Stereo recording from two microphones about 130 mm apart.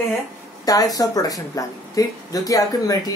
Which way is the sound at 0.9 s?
30° left (ahead or behind).